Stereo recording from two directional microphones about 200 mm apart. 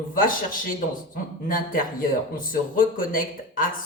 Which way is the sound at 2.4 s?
45° left (ahead or behind).